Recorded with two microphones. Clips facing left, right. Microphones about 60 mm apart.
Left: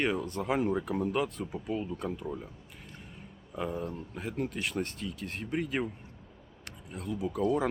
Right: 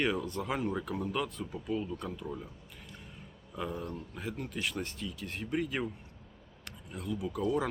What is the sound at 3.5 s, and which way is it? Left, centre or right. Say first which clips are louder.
Speech: left 3 dB; centre.